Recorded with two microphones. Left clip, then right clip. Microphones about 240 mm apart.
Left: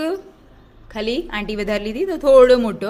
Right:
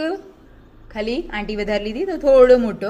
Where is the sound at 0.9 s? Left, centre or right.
Centre.